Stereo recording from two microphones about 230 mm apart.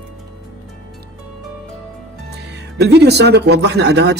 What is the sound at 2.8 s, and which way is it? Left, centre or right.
A man's voice, right.